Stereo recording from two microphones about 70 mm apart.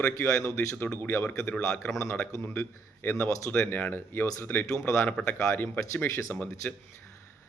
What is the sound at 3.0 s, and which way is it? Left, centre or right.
A man's voice, left.